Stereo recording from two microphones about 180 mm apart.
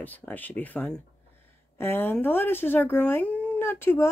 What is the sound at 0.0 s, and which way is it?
Speech, 10° left (ahead or behind).